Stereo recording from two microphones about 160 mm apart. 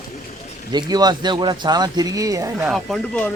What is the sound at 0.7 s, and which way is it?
Speech, 25° right (ahead or behind).